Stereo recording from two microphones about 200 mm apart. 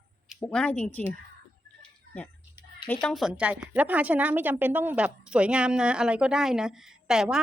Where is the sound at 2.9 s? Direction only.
5° left (ahead or behind).